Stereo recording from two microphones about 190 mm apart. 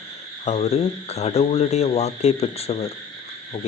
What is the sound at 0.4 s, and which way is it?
Speech, 35° left (ahead or behind).